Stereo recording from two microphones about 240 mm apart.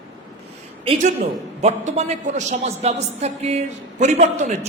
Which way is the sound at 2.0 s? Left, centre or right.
Right.